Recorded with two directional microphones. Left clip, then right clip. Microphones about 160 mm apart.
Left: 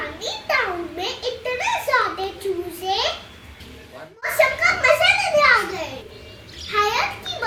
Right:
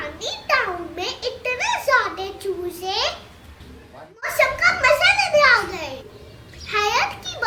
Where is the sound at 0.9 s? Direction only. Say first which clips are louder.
Left 1 dB; 30° right (ahead or behind).